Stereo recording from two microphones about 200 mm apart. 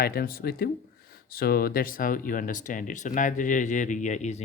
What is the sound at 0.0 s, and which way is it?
Speech, 50° left (ahead or behind).